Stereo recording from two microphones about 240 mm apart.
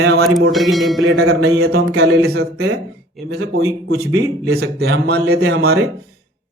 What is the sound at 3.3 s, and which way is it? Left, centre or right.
A man's voice, right.